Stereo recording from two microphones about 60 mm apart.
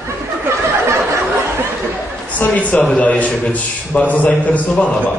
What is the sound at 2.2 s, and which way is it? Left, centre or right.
A man's voice, left.